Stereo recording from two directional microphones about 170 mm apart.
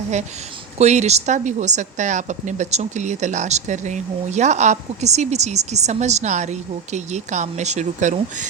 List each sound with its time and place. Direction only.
0.8 s speech: 40° right (ahead or behind)